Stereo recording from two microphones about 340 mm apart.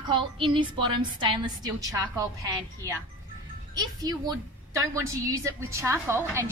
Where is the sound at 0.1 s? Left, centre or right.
Centre.